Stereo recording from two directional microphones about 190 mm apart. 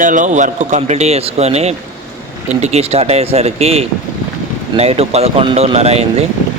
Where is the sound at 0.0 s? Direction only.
45° right (ahead or behind).